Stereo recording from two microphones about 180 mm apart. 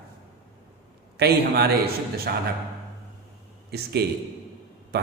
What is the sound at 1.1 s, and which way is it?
Speech, 65° right (ahead or behind).